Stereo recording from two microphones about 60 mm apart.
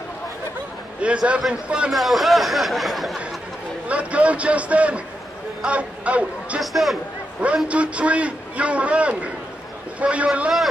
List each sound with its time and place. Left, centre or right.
1.0 s a man's voice: centre
1.9 s speech: centre
3.8 s a man's voice: right
6.6 s speech: centre
7.3 s a man's voice: centre